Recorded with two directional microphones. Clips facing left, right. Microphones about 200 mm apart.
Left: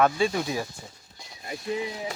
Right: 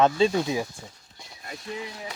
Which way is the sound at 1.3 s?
15° left (ahead or behind).